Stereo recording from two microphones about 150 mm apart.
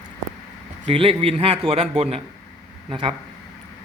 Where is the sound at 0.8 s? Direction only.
40° right (ahead or behind).